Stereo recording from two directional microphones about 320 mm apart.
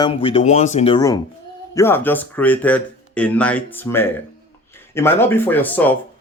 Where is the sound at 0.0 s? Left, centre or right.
Centre.